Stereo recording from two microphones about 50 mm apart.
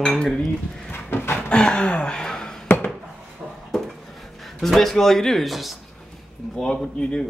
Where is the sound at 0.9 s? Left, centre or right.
Left.